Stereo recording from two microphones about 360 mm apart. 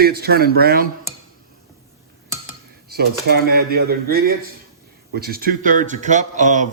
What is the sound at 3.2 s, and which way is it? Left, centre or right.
A man's voice, right.